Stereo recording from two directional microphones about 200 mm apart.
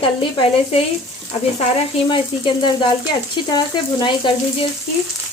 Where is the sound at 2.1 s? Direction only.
25° left (ahead or behind).